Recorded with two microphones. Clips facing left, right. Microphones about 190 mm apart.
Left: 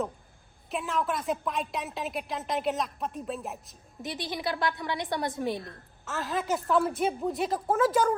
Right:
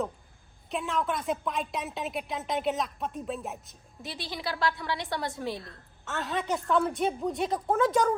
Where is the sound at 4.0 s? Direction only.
20° left (ahead or behind).